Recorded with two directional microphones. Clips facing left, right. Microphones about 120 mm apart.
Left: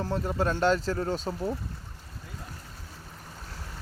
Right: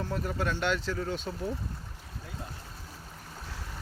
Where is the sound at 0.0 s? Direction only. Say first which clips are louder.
Left 4 dB; 30° left (ahead or behind).